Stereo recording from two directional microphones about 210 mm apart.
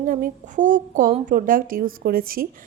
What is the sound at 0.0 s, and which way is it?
A woman's voice, 40° right (ahead or behind).